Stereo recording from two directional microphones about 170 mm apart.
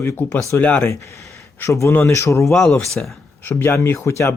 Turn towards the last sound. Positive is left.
turn(degrees=15)  # may be behind; listen again after turning